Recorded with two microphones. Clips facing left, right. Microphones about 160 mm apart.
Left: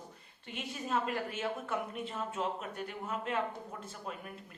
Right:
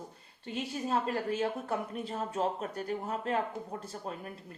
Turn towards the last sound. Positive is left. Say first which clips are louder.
# right 3 dB
turn(degrees=-40)  # may be behind; listen again after turning